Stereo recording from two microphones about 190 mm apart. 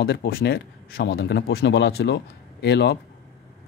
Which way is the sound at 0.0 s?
55° left (ahead or behind).